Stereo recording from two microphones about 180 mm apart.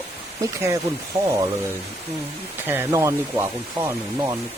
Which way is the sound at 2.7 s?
15° right (ahead or behind).